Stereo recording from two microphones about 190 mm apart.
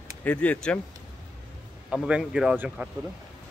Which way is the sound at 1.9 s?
5° right (ahead or behind).